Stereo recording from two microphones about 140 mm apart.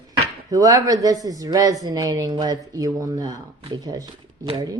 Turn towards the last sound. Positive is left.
turn(degrees=-30)  # may be behind; listen again after turning